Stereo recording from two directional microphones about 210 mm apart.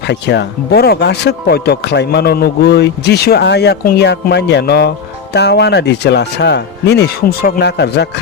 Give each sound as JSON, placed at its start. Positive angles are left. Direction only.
{"t": 0.1, "sound": "speech", "side_deg": 55}